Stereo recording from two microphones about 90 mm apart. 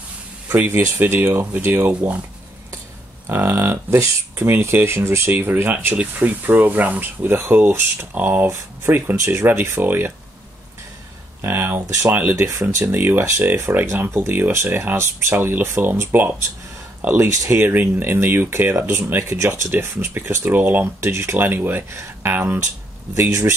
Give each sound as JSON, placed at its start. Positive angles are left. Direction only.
{"t": 0.5, "sound": "speech", "side_deg": -25}
{"t": 3.3, "sound": "speech", "side_deg": -25}
{"t": 11.4, "sound": "speech", "side_deg": -25}